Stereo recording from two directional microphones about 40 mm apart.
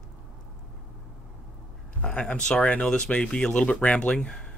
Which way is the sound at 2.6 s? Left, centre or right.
Left.